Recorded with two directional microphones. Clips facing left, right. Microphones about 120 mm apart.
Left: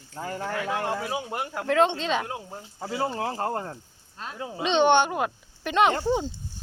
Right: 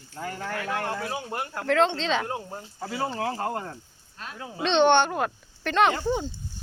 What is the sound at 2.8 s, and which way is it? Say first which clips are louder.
Speech: left 1 dB; 25° left (ahead or behind).